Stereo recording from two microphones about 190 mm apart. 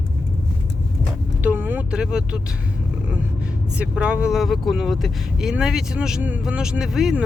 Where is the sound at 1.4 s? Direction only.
10° right (ahead or behind).